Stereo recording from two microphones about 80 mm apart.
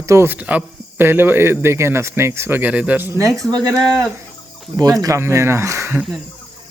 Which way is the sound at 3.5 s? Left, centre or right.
Right.